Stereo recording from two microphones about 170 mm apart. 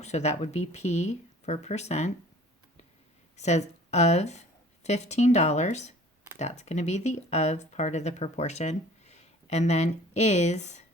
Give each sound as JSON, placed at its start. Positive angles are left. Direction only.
{"t": 0.0, "sound": "speech", "side_deg": 40}
{"t": 3.3, "sound": "speech", "side_deg": 40}